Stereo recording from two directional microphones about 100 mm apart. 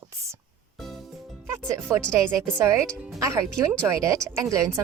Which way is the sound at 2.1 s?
30° right (ahead or behind).